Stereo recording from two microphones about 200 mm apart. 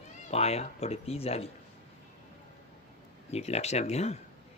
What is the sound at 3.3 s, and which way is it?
Speech, 30° left (ahead or behind).